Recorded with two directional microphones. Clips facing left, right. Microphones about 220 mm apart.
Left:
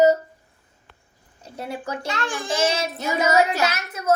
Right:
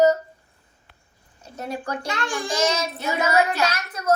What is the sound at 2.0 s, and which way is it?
Speech, 15° right (ahead or behind).